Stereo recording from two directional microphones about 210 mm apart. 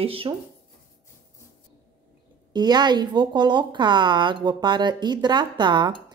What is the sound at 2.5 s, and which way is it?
Speech, 20° right (ahead or behind).